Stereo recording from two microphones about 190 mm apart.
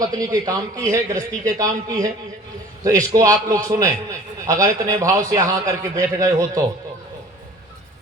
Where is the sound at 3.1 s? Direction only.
20° right (ahead or behind).